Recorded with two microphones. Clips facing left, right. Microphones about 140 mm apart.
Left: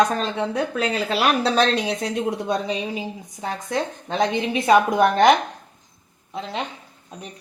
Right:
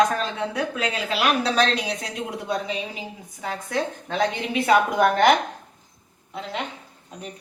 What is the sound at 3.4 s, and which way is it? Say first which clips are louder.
A woman's voice: left 1 dB; 25° left (ahead or behind).